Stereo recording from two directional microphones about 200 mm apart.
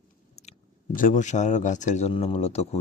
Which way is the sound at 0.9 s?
40° left (ahead or behind).